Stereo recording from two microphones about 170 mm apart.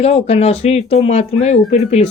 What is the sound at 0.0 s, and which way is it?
Speech, 40° left (ahead or behind).